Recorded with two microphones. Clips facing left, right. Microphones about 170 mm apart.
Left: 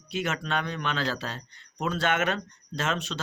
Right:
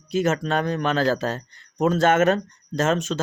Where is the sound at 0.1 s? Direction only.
40° right (ahead or behind).